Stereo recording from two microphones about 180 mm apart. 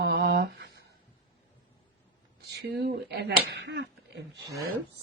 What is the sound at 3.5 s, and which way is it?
Speech, 75° right (ahead or behind).